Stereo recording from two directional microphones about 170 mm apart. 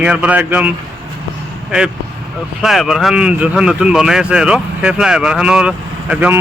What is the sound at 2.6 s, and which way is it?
Speech, centre (ahead or behind).